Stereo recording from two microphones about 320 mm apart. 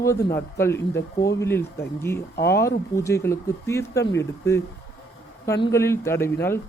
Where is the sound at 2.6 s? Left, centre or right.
Centre.